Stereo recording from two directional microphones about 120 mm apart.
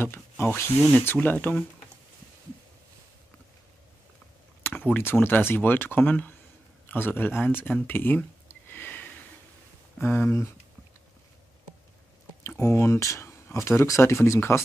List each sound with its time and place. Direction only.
0.0 s speech: 20° left (ahead or behind)
4.6 s speech: 15° left (ahead or behind)
12.4 s speech: 20° left (ahead or behind)